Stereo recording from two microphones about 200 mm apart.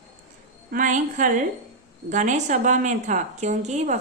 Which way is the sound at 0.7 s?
40° right (ahead or behind).